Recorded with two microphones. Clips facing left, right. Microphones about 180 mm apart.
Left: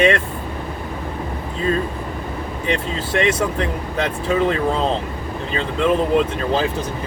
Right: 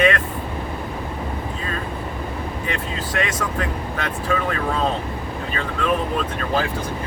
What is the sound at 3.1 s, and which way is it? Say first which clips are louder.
Speech: left 7 dB; 25° left (ahead or behind).